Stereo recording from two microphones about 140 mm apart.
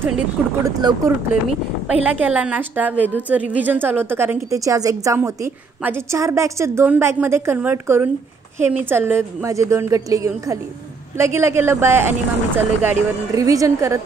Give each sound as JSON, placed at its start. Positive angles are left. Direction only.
{"t": 0.7, "sound": "speech", "side_deg": -25}
{"t": 2.0, "sound": "a woman's voice", "side_deg": -10}